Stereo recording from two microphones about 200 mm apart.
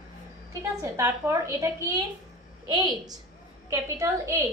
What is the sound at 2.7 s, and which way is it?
A woman's voice, 20° right (ahead or behind).